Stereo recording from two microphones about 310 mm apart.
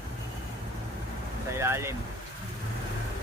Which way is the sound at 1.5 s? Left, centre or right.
Centre.